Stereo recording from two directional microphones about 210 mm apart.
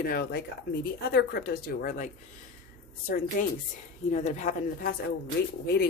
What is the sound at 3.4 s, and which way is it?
A woman's voice, 40° left (ahead or behind).